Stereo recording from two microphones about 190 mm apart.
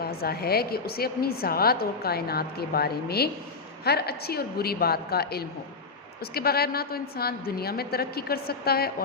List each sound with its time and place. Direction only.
0.0 s a woman's voice: 55° left (ahead or behind)